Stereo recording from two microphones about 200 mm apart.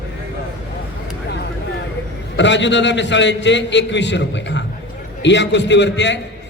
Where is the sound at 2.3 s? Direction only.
65° left (ahead or behind).